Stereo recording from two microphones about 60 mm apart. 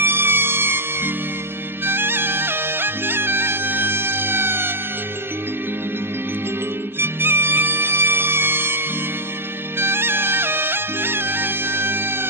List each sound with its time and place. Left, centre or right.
0.0 s music: right
7.0 s music: right